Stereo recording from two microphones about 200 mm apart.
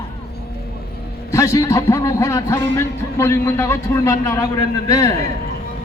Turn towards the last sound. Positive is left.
turn(degrees=15)  # may be behind; listen again after turning